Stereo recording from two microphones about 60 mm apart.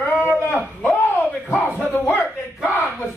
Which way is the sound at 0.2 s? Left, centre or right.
Left.